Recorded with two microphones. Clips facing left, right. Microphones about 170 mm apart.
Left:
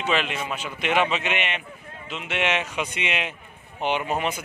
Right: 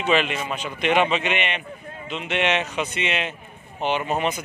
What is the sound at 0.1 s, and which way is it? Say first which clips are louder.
A man's voice: right 4 dB; centre (ahead or behind).